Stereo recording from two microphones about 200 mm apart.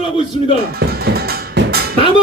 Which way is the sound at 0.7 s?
50° right (ahead or behind).